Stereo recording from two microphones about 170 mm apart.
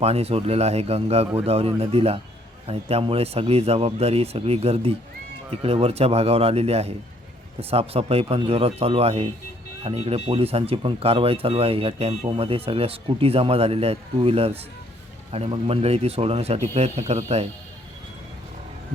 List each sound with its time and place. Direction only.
0.0 s speech: 35° right (ahead or behind)